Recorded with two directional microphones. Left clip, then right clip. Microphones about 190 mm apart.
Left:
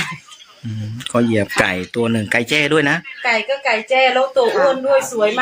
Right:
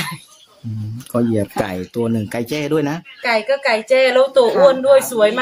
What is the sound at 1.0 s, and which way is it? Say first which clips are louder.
Speech: left 2 dB; centre (ahead or behind).